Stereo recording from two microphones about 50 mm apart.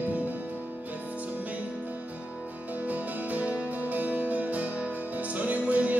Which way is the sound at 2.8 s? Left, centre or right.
Right.